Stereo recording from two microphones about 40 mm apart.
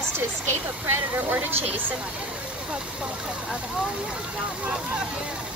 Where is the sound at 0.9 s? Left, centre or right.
Right.